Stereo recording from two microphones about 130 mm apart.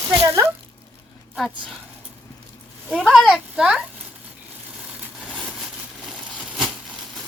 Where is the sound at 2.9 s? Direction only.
5° right (ahead or behind).